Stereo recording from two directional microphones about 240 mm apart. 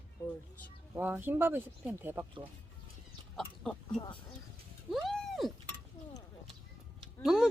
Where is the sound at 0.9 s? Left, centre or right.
Centre.